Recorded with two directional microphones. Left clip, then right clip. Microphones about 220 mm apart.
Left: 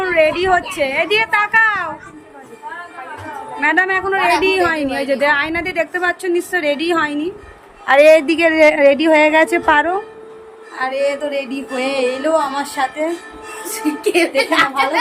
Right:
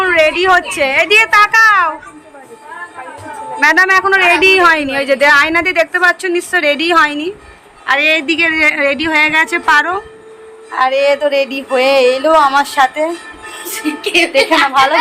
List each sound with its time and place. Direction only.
0.0 s a woman's voice: 5° left (ahead or behind)
3.6 s a woman's voice: 5° left (ahead or behind)
7.9 s a woman's voice: 20° left (ahead or behind); by 13.1 s centre (ahead or behind)
14.0 s a woman's voice: 20° left (ahead or behind)